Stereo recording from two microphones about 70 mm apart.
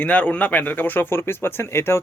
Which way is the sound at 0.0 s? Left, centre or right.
Centre.